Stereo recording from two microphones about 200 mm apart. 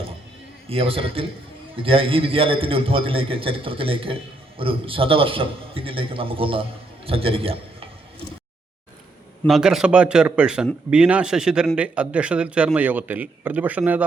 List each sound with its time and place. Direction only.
0.7 s a man's voice: 30° right (ahead or behind)
9.5 s speech: 5° right (ahead or behind)